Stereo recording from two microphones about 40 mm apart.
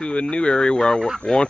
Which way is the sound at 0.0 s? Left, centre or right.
Left.